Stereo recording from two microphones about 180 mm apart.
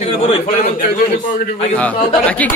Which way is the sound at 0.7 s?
50° left (ahead or behind).